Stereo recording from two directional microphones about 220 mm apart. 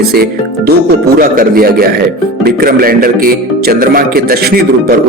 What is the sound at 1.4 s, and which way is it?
Speech, 40° right (ahead or behind).